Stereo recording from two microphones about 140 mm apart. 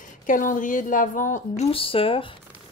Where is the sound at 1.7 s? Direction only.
40° left (ahead or behind).